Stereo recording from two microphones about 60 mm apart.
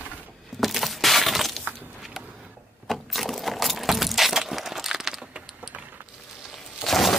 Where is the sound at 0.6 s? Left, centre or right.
Centre.